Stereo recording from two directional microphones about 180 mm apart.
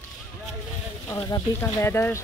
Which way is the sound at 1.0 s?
20° left (ahead or behind).